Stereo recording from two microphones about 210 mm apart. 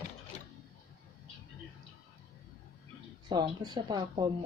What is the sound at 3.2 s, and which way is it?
Speech, 20° right (ahead or behind).